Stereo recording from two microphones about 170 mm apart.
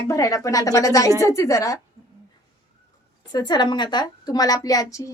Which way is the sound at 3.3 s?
25° left (ahead or behind).